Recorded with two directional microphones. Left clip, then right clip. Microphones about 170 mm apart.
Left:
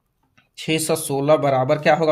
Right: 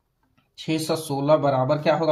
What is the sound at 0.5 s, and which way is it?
Speech, 45° left (ahead or behind).